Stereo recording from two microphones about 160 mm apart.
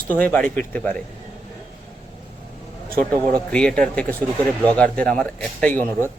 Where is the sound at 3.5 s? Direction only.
5° left (ahead or behind).